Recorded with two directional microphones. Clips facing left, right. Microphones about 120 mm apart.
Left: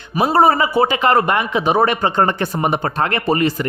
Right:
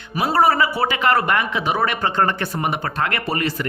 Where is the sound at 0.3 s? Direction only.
25° left (ahead or behind).